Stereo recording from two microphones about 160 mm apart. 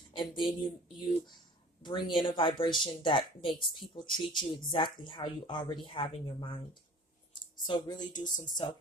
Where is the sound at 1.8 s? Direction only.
30° left (ahead or behind).